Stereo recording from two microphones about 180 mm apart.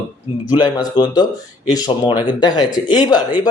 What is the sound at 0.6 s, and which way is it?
A man's voice, 25° left (ahead or behind).